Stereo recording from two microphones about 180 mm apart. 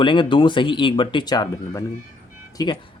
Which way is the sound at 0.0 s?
25° left (ahead or behind).